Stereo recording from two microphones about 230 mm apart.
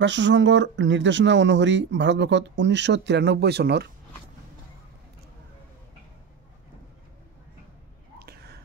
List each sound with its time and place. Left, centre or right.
0.0 s speech: right
8.2 s whispering: right